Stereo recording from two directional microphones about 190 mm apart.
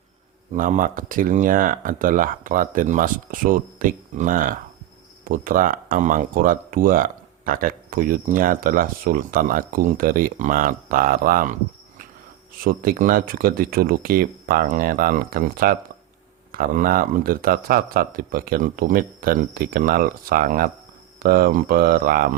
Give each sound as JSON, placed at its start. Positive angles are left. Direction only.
{"t": 0.5, "sound": "speech", "side_deg": -45}
{"t": 12.6, "sound": "speech", "side_deg": -50}